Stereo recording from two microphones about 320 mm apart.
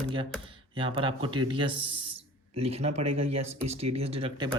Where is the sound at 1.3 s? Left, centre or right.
Centre.